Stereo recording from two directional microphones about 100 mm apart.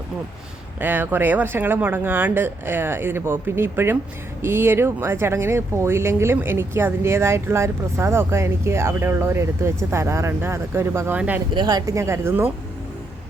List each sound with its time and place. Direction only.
0.8 s speech: 20° right (ahead or behind)
11.5 s speech: 40° right (ahead or behind); by 12.5 s 25° right (ahead or behind)